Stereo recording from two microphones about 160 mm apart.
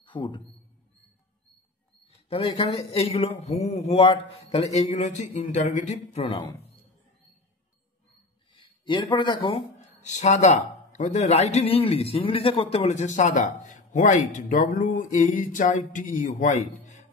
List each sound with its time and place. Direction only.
0.0 s a man's voice: 30° left (ahead or behind)
2.0 s a man's voice: 35° left (ahead or behind)
8.5 s speech: 30° left (ahead or behind)
9.9 s a man's voice: 45° left (ahead or behind)